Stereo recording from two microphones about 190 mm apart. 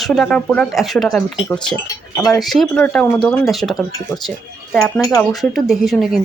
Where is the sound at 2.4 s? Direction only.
Centre (ahead or behind).